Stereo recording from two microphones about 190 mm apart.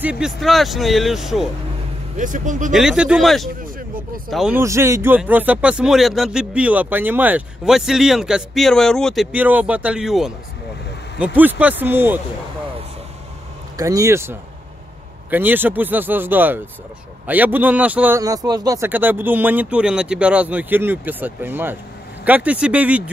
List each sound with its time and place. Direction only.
0.0 s speech: 5° right (ahead or behind)
2.1 s speech: 40° right (ahead or behind)
2.7 s speech: 5° right (ahead or behind)
4.6 s speech: 15° right (ahead or behind)
13.7 s speech: 15° right (ahead or behind)